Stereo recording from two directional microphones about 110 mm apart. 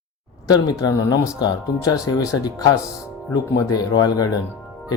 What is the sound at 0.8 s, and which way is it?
Speech, 30° left (ahead or behind).